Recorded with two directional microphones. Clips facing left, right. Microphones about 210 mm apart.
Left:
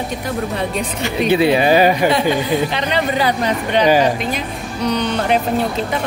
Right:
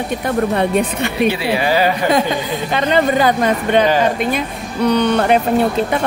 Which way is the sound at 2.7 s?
50° right (ahead or behind).